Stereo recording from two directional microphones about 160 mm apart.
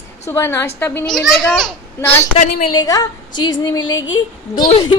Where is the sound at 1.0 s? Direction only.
Centre (ahead or behind).